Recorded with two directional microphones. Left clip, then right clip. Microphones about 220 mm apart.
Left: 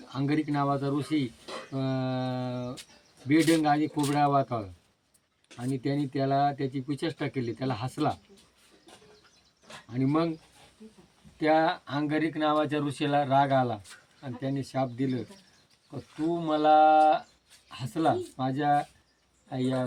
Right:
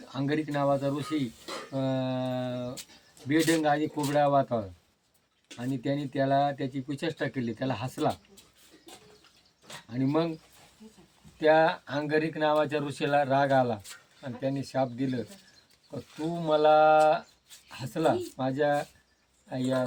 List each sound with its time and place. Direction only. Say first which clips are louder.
0.1 s speech: left 1 dB; 5° left (ahead or behind)
1.7 s a sound: right 1 dB; 5° left (ahead or behind)
3.2 s speech: left 1 dB; 5° left (ahead or behind)
5.5 s speech: left 1 dB; 5° left (ahead or behind)
9.9 s speech: even; 5° left (ahead or behind)
11.3 s speech: right 2 dB; centre (ahead or behind)
16.4 s speech: even; centre (ahead or behind)